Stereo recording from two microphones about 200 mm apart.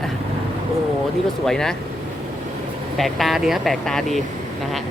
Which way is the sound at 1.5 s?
5° left (ahead or behind).